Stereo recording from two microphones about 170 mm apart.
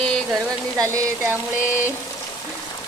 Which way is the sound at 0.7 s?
20° right (ahead or behind).